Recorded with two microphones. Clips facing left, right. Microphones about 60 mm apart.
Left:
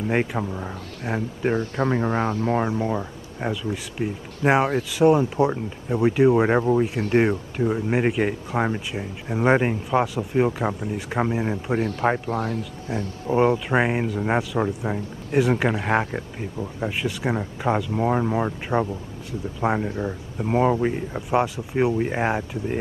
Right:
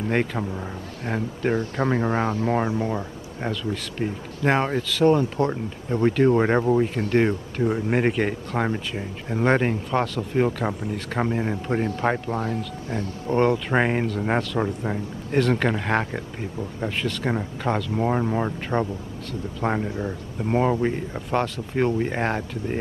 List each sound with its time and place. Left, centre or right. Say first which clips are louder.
0.1 s speech: left 1 dB; centre
1.9 s speech: right 1 dB; centre
2.8 s speech: left 1 dB; centre
7.1 s speech: left 1 dB; centre
7.6 s speech: even; centre
12.3 s speech: left 1 dB; left
12.9 s speech: left 1 dB; centre